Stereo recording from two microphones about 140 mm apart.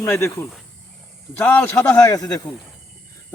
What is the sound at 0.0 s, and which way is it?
Speech, 15° left (ahead or behind).